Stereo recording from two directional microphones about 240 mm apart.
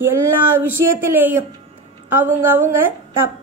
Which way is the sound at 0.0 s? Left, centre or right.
Centre.